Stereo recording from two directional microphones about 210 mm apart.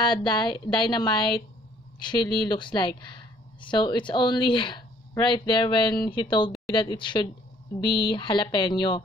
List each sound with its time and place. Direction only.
0.0 s speech: 20° left (ahead or behind)